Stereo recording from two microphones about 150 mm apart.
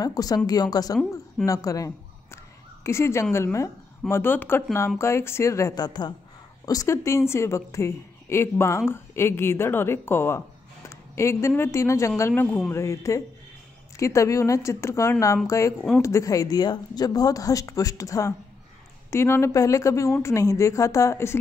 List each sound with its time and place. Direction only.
0.0 s a woman's voice: 25° left (ahead or behind)